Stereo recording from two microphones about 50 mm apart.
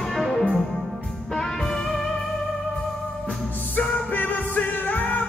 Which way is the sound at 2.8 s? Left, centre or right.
Left.